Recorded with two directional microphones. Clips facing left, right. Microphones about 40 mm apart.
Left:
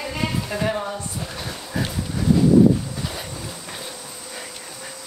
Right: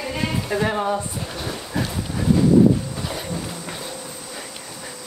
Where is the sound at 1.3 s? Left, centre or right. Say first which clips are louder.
Right 4 dB; centre.